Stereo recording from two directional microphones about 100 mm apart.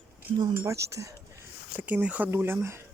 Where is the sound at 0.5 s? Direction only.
30° right (ahead or behind).